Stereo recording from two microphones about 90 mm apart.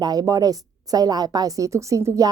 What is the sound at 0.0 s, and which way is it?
A woman's voice, 45° right (ahead or behind).